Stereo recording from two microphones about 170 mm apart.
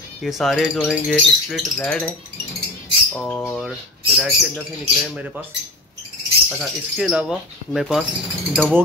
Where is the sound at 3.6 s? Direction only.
Centre (ahead or behind).